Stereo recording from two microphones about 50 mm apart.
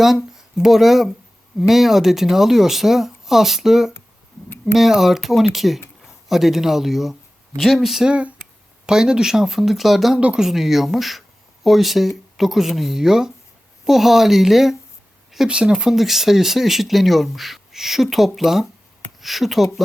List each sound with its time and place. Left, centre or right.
0.0 s speech: centre
8.0 s speech: centre
10.2 s speech: right
10.4 s speech: centre
15.4 s speech: centre